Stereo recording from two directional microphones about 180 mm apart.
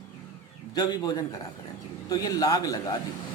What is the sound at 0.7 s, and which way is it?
A man's voice, 20° left (ahead or behind).